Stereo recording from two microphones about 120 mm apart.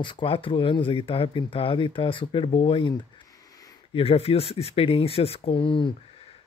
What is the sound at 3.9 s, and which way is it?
Speech, 50° left (ahead or behind).